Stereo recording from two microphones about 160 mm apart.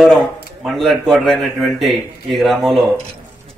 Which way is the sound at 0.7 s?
Centre (ahead or behind).